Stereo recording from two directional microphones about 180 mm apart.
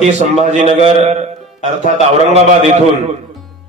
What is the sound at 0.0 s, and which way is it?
A man's voice, 40° right (ahead or behind).